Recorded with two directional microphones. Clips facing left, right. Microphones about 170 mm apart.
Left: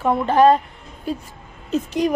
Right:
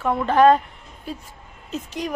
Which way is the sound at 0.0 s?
30° left (ahead or behind).